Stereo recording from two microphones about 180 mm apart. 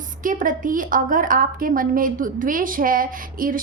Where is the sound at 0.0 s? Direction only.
50° right (ahead or behind).